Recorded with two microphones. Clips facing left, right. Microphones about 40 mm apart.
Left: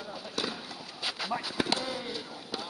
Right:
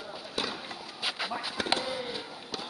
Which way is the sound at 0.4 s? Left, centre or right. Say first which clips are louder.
Right 1 dB; centre.